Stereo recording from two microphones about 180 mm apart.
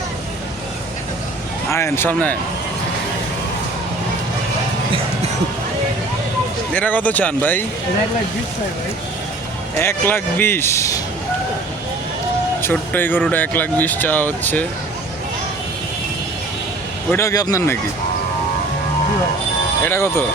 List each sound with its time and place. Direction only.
1.7 s speech: 15° left (ahead or behind)
6.7 s speech: 10° left (ahead or behind)
9.7 s speech: 10° left (ahead or behind)
12.6 s speech: 10° left (ahead or behind)
17.1 s speech: 15° left (ahead or behind)
19.8 s speech: 15° left (ahead or behind)